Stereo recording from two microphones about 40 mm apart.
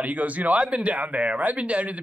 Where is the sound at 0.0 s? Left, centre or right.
Right.